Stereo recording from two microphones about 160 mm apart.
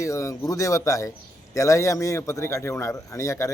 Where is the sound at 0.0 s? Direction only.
20° left (ahead or behind).